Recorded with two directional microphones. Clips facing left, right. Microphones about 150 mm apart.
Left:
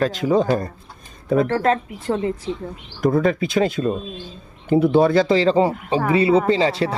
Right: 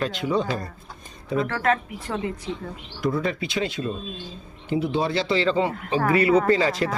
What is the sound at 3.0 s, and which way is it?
A woman's voice, 50° left (ahead or behind).